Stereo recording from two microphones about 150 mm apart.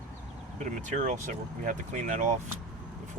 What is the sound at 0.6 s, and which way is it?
Speech, 55° right (ahead or behind).